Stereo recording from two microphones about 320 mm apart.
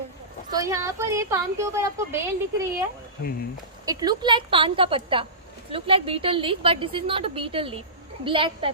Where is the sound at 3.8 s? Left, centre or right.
Centre.